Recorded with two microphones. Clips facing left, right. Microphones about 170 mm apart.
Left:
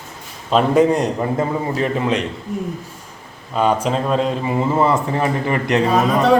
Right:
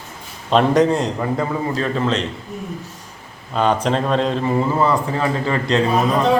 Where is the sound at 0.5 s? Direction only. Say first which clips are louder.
Left 1 dB; 5° left (ahead or behind).